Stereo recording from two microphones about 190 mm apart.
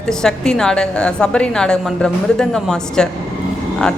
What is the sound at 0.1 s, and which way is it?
Speech, 5° left (ahead or behind).